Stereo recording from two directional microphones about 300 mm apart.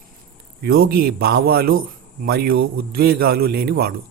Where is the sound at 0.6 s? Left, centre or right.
Right.